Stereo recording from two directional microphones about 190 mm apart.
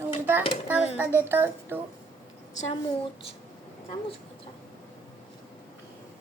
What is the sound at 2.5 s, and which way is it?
Speech, 40° left (ahead or behind).